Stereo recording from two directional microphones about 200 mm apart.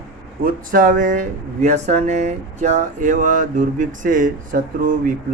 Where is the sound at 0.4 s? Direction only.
45° right (ahead or behind).